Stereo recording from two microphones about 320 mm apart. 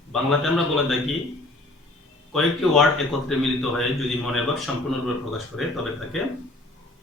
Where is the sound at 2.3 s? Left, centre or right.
Centre.